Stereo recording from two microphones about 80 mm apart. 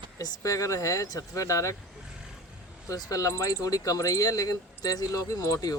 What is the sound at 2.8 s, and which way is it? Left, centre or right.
Speech, left.